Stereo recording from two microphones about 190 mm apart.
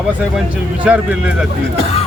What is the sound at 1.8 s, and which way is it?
Speech, 30° left (ahead or behind).